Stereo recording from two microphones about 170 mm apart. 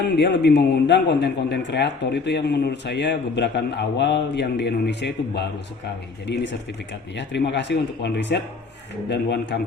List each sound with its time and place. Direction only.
0.2 s a man's voice: 85° left